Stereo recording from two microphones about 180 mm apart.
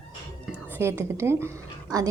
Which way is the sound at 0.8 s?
15° right (ahead or behind).